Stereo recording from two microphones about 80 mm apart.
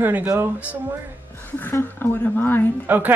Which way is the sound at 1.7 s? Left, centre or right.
Left.